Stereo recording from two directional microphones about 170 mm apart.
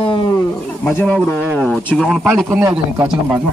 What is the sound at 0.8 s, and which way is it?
A man's voice, 10° left (ahead or behind).